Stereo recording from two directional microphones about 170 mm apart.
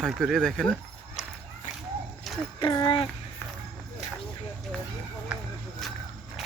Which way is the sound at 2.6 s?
25° left (ahead or behind).